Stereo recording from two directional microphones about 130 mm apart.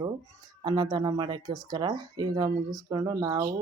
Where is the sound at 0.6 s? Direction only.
35° right (ahead or behind).